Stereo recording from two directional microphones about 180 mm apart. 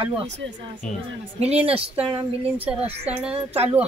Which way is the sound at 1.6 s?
30° right (ahead or behind).